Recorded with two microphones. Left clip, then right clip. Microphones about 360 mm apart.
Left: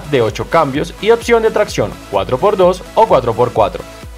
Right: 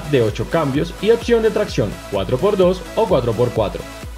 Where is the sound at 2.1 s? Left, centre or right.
Left.